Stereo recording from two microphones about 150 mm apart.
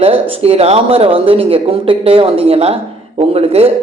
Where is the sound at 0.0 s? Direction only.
40° right (ahead or behind).